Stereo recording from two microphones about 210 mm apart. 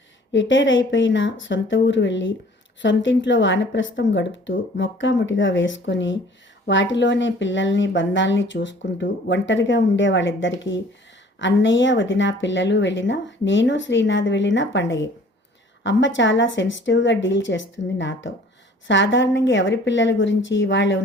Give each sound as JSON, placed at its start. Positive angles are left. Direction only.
{"t": 0.3, "sound": "speech", "side_deg": 60}